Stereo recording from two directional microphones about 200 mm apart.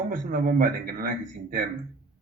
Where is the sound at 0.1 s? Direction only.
40° right (ahead or behind).